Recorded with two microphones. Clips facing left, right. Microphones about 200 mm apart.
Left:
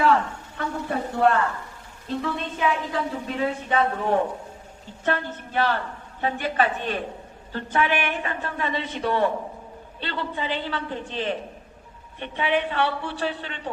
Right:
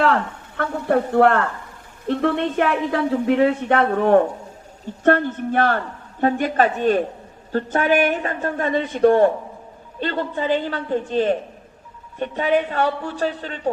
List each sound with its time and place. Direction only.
0.0 s a woman's voice: 60° right (ahead or behind); by 13.6 s 40° right (ahead or behind)